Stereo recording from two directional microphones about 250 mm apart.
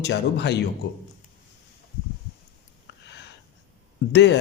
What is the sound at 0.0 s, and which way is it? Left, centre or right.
Speech, left.